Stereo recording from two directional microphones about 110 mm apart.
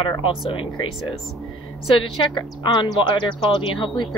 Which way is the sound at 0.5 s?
50° left (ahead or behind).